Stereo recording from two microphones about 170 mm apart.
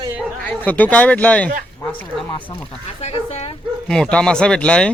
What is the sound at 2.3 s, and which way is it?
Speech, 30° left (ahead or behind).